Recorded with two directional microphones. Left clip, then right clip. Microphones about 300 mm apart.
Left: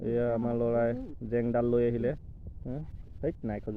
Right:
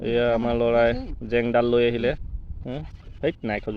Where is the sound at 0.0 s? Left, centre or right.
Centre.